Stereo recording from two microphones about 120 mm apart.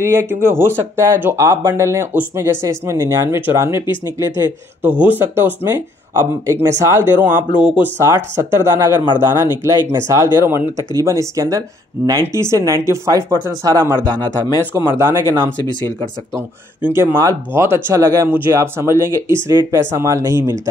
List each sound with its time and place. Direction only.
0.0 s speech: 20° right (ahead or behind)
8.0 s speech: 25° right (ahead or behind)
16.8 s speech: 20° right (ahead or behind)